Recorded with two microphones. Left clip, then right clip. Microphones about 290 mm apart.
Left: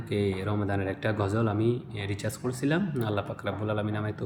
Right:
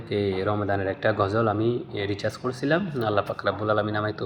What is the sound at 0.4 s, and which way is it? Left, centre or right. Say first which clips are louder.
Mantra: right 6 dB; right.